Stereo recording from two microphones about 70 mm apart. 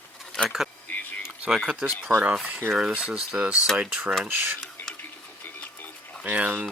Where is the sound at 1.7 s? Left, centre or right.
Centre.